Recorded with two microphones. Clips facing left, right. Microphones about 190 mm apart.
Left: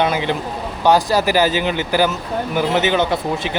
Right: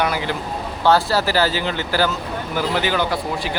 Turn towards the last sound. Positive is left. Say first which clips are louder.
# left 3 dB
turn(degrees=20)  # may be behind; listen again after turning